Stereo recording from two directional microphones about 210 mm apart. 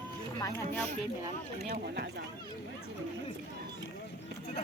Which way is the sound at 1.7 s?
50° right (ahead or behind).